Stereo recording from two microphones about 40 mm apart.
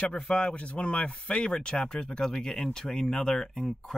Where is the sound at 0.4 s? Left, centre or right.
Left.